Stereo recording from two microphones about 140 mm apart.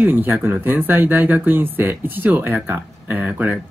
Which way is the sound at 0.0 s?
15° right (ahead or behind).